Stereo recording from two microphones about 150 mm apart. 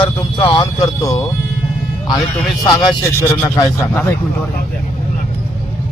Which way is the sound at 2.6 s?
20° left (ahead or behind).